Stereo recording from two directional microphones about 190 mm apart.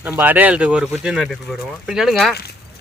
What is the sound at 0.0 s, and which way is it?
Speech, 10° right (ahead or behind).